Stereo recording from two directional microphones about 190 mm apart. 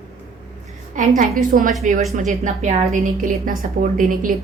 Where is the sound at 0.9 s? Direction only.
45° right (ahead or behind).